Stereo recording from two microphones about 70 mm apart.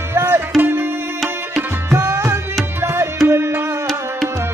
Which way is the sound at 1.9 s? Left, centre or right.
Right.